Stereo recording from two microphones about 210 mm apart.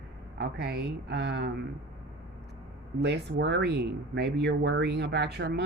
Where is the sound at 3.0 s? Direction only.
55° right (ahead or behind).